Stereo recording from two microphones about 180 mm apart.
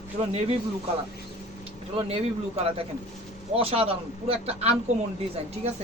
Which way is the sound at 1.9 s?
30° right (ahead or behind).